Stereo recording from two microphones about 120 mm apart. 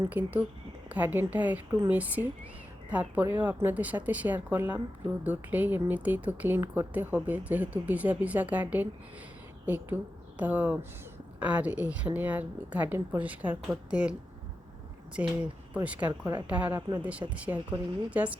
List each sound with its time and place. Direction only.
0.0 s a woman's voice: 15° right (ahead or behind)
15.2 s speech: 15° right (ahead or behind)